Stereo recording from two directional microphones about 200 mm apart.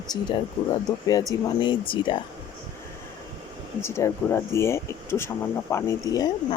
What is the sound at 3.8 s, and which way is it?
Speech, 15° left (ahead or behind).